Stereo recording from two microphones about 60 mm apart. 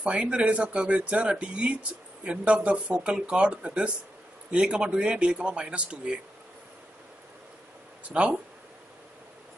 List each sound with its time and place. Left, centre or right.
0.0 s a man's voice: centre
8.0 s speech: centre